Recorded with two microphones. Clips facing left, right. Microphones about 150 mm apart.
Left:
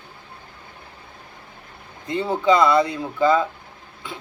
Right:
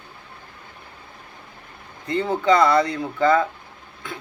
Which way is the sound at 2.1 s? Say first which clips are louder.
Even; 10° left (ahead or behind).